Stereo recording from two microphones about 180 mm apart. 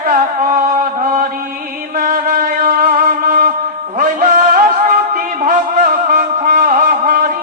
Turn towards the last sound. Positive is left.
turn(degrees=-50)  # may be behind; listen again after turning